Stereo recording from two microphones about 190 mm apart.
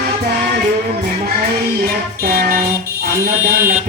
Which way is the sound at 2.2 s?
55° right (ahead or behind).